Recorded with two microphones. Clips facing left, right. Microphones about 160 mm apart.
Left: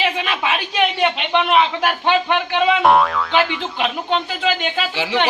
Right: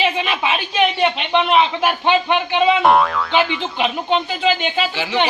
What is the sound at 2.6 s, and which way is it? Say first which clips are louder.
Speech: even; centre (ahead or behind).